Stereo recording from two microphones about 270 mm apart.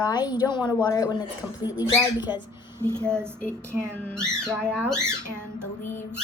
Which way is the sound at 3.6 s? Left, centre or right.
Centre.